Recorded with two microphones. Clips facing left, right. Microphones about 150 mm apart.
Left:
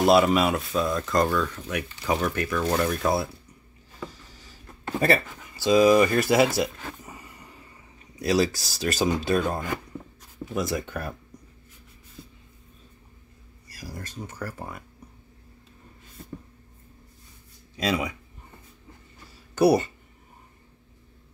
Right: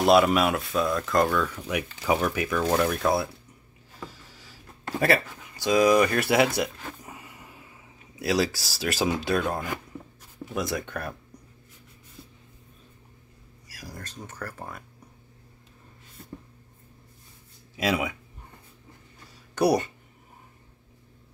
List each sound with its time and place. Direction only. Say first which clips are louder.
0.0 s speech: even; centre (ahead or behind)
4.0 s a sound: left 3 dB; centre (ahead or behind)
4.9 s speech: left 1 dB; centre (ahead or behind)
13.7 s speech: left 3 dB; centre (ahead or behind)
17.7 s speech: even; 5° right (ahead or behind)
19.5 s speech: left 3 dB; centre (ahead or behind)